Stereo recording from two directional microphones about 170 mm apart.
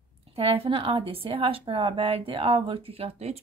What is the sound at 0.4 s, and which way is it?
Speech, 35° right (ahead or behind).